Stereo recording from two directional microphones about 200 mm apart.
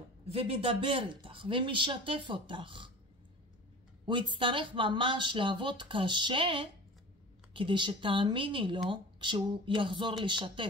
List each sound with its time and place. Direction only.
0.3 s speech: 30° right (ahead or behind)
4.0 s speech: 25° right (ahead or behind)